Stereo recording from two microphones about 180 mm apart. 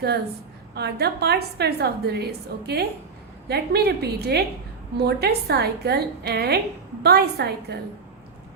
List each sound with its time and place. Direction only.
0.7 s a woman's voice: 65° right (ahead or behind)